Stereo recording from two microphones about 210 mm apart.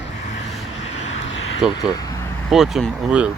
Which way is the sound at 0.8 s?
30° left (ahead or behind).